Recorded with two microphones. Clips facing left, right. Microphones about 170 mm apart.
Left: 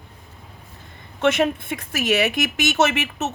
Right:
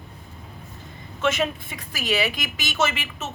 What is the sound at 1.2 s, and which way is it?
A woman's voice, 65° left (ahead or behind).